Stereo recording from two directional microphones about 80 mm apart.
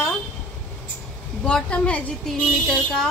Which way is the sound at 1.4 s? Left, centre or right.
Centre.